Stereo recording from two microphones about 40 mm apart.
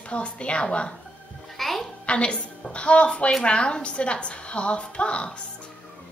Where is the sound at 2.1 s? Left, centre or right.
Left.